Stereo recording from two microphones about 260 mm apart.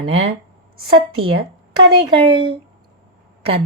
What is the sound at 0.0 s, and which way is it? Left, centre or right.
Speech, right.